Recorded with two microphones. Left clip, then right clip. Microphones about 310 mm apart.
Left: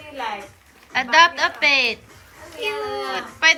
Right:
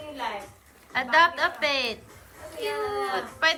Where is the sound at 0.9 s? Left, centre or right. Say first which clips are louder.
Left 6 dB; centre.